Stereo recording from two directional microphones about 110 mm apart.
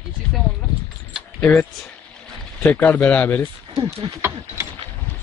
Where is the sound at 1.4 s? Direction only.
15° left (ahead or behind).